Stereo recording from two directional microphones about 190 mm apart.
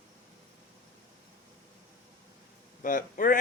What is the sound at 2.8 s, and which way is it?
Speech, 45° left (ahead or behind).